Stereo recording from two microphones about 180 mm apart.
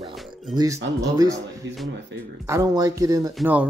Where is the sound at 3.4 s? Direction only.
10° right (ahead or behind).